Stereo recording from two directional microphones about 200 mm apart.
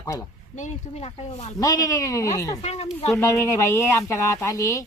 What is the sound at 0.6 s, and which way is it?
Speech, 35° left (ahead or behind).